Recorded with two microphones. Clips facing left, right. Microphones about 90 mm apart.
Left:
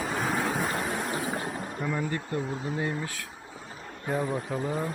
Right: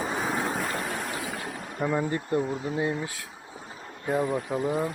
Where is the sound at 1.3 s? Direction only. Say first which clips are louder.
Left 3 dB; 35° left (ahead or behind).